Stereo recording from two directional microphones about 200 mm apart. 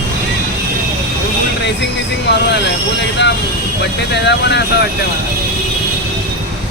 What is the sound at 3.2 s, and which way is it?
Speech, 60° left (ahead or behind).